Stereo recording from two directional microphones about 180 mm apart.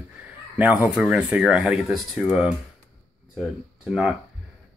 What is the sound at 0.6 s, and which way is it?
Speech, 10° right (ahead or behind).